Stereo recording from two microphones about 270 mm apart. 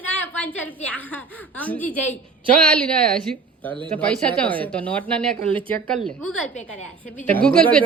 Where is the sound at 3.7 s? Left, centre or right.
Centre.